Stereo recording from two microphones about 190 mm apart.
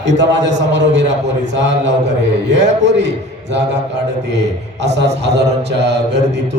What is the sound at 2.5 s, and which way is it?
Speech, 70° right (ahead or behind).